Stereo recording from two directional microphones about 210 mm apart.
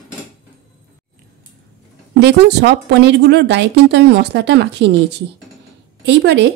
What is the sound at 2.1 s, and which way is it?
Speech, 55° right (ahead or behind).